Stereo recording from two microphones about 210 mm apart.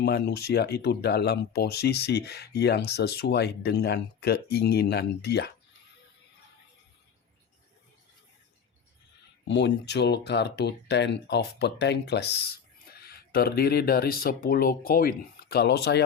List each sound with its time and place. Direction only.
0.0 s speech: 50° left (ahead or behind)
9.5 s speech: 55° left (ahead or behind)